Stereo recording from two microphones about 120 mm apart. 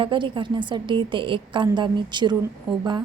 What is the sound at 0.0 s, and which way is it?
A woman's voice, 45° right (ahead or behind).